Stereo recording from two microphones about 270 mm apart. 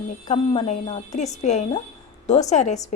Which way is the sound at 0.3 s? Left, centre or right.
Left.